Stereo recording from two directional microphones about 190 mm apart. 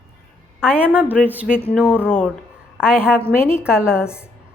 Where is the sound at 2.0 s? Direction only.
10° left (ahead or behind).